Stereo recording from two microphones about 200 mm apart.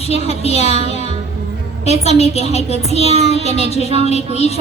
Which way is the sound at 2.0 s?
30° left (ahead or behind).